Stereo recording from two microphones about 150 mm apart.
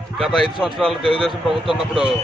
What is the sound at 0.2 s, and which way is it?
Speech, centre (ahead or behind).